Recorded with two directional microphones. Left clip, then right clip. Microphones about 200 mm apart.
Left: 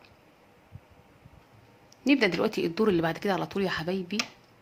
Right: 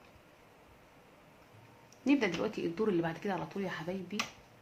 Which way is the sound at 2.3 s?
50° left (ahead or behind).